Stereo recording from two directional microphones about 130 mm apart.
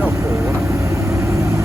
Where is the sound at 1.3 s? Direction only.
25° right (ahead or behind).